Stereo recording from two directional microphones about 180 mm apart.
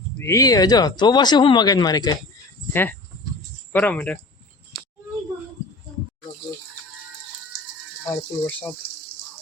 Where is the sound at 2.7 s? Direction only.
10° left (ahead or behind).